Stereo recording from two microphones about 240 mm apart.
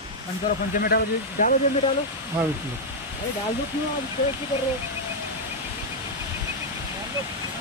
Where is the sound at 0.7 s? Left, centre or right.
Left.